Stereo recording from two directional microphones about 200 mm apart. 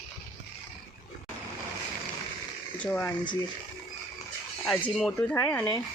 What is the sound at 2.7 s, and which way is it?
Speech, 5° left (ahead or behind).